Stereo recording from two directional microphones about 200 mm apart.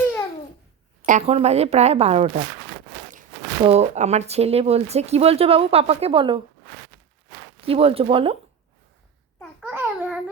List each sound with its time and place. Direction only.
1.0 s speech: 35° right (ahead or behind)
3.6 s speech: 30° right (ahead or behind)
7.7 s speech: 30° right (ahead or behind)
9.4 s babbling: centre (ahead or behind)